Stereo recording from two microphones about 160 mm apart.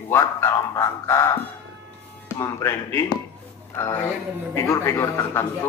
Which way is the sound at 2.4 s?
20° left (ahead or behind).